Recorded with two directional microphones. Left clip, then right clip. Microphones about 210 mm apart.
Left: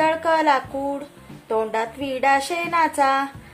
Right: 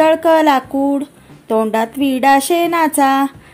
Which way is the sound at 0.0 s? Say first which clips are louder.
Right 8 dB; 40° right (ahead or behind).